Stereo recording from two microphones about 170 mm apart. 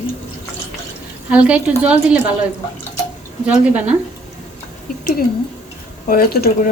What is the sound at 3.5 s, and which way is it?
Speech, 5° right (ahead or behind).